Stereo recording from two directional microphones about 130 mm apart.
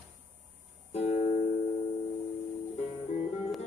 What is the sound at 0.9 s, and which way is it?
Music, 55° left (ahead or behind).